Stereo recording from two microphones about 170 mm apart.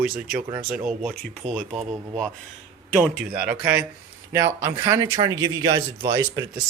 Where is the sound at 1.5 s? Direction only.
5° right (ahead or behind); by 6.2 s 25° right (ahead or behind).